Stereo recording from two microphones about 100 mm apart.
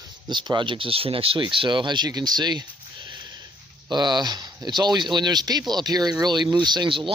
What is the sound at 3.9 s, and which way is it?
Speech, 45° right (ahead or behind).